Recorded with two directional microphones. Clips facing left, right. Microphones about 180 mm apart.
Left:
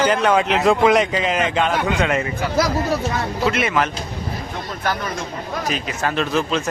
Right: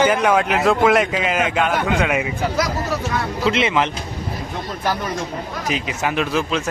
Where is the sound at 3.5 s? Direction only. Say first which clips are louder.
Right 2 dB; 25° right (ahead or behind).